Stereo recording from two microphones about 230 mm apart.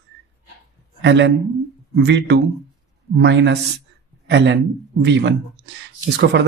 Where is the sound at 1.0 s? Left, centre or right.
Right.